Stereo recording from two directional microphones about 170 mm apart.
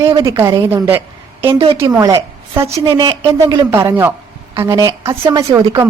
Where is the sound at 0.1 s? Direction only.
25° right (ahead or behind).